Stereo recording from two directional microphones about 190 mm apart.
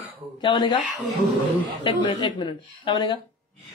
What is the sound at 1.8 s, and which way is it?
Speech, 25° left (ahead or behind).